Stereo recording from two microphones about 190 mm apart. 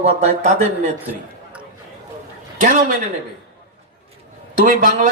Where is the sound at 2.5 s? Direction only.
40° right (ahead or behind).